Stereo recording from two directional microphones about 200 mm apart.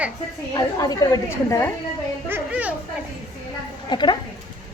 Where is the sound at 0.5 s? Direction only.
20° left (ahead or behind).